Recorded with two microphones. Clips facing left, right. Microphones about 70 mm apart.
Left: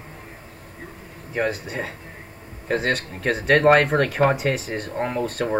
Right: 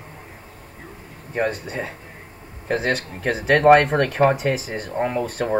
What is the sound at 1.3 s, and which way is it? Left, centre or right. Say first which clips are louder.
Speech: right 1 dB; centre.